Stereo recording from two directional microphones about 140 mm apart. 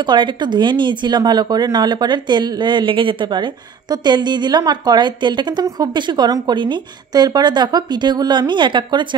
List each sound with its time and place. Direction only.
0.0 s speech: 35° right (ahead or behind)